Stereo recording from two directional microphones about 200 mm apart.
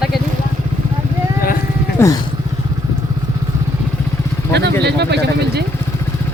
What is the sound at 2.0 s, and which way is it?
Speech, 15° left (ahead or behind).